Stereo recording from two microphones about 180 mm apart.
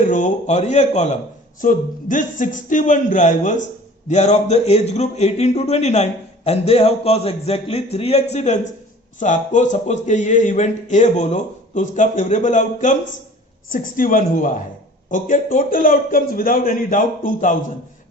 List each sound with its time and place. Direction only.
0.1 s a man's voice: 45° left (ahead or behind)